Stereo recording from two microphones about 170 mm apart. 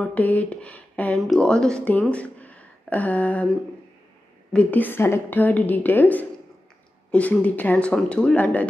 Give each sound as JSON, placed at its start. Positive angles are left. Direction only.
{"t": 0.0, "sound": "speech", "side_deg": 10}
{"t": 4.5, "sound": "a woman's voice", "side_deg": 5}